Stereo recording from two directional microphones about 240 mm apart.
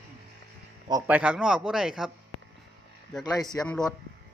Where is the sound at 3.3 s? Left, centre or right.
Centre.